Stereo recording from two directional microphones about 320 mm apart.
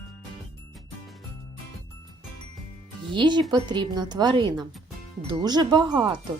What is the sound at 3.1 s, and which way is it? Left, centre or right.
Speech, centre.